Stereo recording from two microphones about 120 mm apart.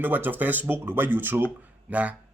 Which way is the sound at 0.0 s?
15° right (ahead or behind).